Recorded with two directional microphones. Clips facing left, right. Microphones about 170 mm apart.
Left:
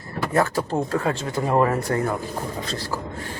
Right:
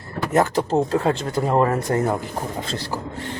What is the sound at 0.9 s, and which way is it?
Speech, 25° right (ahead or behind).